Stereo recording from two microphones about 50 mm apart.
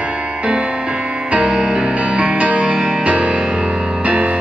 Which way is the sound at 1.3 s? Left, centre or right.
Centre.